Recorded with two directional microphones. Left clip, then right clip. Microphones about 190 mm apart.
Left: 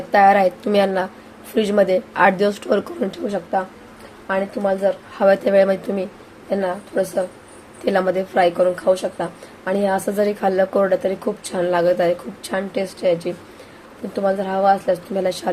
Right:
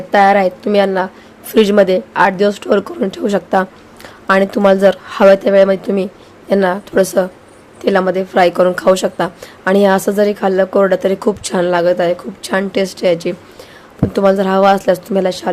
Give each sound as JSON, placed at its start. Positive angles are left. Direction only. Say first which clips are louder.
{"t": 0.1, "sound": "a woman's voice", "louder": "right 3 dB", "side_deg": -20}
{"t": 3.2, "sound": "speech", "louder": "right 8 dB", "side_deg": -30}
{"t": 4.3, "sound": "speech", "louder": "right 10 dB", "side_deg": -45}
{"t": 5.5, "sound": "a woman's voice", "louder": "right 5 dB", "side_deg": -20}
{"t": 7.9, "sound": "a woman's voice", "louder": "right 5 dB", "side_deg": -25}